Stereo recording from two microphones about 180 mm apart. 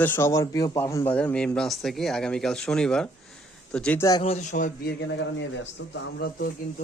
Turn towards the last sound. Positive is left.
turn(degrees=60)  # may be behind; listen again after turning